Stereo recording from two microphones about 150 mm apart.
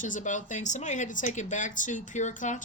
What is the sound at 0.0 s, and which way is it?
Speech, 60° left (ahead or behind).